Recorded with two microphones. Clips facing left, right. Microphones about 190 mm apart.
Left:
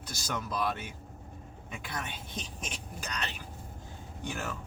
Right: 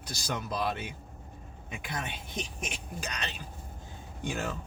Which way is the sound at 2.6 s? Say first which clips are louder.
Right 3 dB; 20° right (ahead or behind).